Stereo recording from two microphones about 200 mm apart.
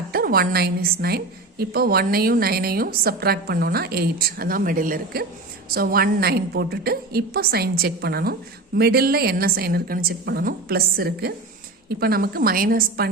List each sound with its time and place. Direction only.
0.1 s a woman's voice: 50° right (ahead or behind)